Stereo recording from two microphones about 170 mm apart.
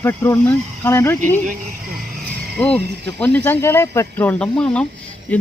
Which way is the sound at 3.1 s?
10° left (ahead or behind).